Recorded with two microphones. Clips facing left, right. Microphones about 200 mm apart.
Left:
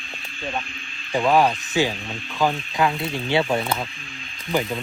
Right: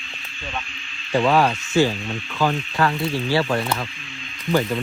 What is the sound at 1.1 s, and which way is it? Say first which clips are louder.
Speech: even; 15° left (ahead or behind).